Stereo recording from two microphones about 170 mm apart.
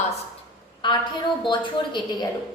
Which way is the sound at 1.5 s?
25° left (ahead or behind).